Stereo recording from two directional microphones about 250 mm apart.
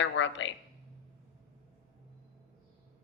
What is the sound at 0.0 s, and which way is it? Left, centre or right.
Speech, left.